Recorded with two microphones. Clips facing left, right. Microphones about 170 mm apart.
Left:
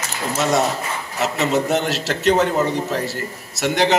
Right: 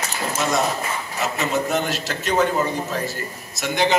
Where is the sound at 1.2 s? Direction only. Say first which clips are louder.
Left 4 dB; 70° left (ahead or behind).